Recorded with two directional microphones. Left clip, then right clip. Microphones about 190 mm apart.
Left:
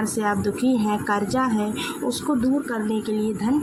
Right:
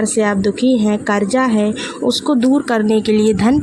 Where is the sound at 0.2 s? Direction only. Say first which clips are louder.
Right 7 dB; 35° right (ahead or behind).